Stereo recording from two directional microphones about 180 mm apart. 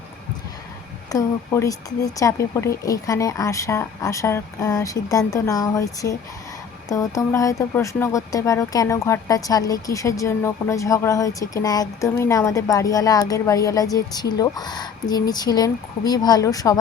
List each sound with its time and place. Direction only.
1.1 s speech: 20° left (ahead or behind)